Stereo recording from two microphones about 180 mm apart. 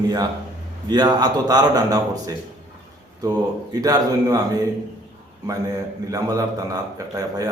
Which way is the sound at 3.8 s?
20° right (ahead or behind).